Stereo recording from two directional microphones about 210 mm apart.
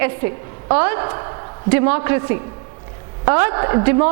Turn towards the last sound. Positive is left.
turn(degrees=-15)  # may be behind; listen again after turning